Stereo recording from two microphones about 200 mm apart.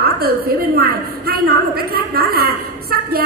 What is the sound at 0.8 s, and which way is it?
A woman's voice, 50° right (ahead or behind).